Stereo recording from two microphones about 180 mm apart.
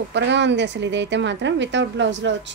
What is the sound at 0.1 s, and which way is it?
A woman's voice, 80° right.